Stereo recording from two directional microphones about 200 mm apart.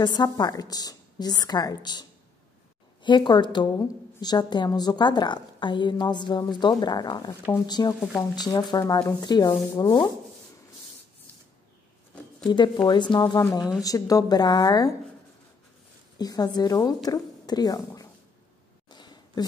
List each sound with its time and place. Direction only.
0.0 s a woman's voice: 20° left (ahead or behind)
12.4 s a woman's voice: 20° left (ahead or behind)
13.6 s a woman's voice: 5° right (ahead or behind)
13.8 s a woman's voice: 15° left (ahead or behind)
16.2 s a woman's voice: 20° left (ahead or behind)
18.9 s a sound: 20° left (ahead or behind)